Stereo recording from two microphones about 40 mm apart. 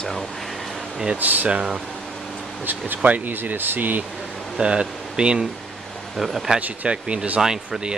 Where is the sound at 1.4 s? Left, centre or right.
Right.